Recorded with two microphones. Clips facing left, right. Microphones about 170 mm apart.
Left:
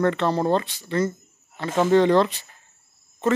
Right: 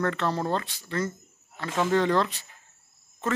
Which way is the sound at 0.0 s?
20° left (ahead or behind).